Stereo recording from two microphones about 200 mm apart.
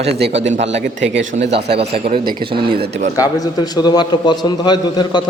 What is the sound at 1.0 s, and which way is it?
A man's voice, 65° right (ahead or behind).